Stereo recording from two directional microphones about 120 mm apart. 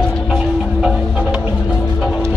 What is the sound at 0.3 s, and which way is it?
Music, 5° right (ahead or behind).